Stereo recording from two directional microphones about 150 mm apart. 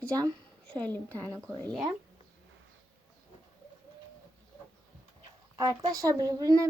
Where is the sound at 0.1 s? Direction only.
25° right (ahead or behind).